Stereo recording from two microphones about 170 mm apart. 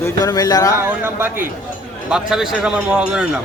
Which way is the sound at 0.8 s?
10° right (ahead or behind).